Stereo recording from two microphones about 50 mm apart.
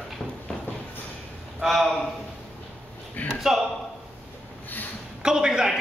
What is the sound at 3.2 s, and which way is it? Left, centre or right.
Speech, left.